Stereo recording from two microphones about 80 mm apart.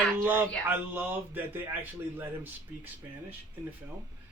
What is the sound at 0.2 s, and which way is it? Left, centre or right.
A man's voice, right.